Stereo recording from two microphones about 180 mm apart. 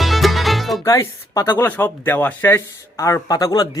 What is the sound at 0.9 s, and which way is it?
Speech, 15° left (ahead or behind).